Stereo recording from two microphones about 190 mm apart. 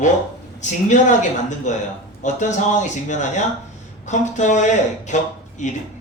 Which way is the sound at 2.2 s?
40° left (ahead or behind).